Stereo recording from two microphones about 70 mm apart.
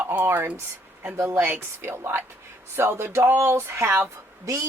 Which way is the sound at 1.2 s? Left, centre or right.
Right.